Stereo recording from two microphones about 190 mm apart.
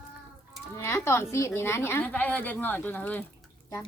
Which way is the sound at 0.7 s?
15° left (ahead or behind).